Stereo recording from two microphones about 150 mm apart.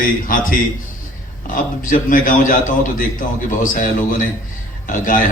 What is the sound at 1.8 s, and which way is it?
A man's voice, 65° left (ahead or behind).